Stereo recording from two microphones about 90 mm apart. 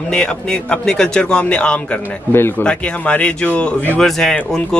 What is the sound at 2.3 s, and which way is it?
Speech, 25° left (ahead or behind).